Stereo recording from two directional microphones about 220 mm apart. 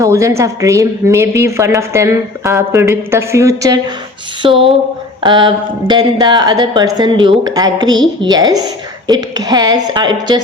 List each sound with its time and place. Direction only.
0.0 s a woman's voice: 15° right (ahead or behind)